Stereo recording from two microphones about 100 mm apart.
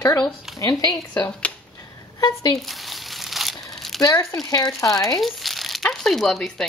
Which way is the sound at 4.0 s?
35° left (ahead or behind).